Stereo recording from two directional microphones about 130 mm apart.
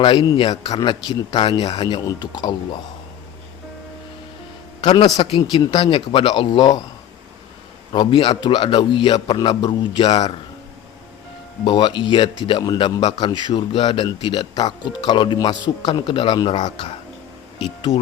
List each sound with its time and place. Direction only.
0.0 s a man's voice: 35° left (ahead or behind)
4.8 s a man's voice: 35° left (ahead or behind)
7.9 s a man's voice: 40° left (ahead or behind)
11.6 s a man's voice: 35° left (ahead or behind)